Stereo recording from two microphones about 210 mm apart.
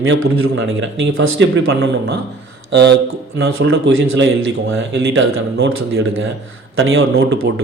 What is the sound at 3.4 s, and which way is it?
Speech, 65° right (ahead or behind).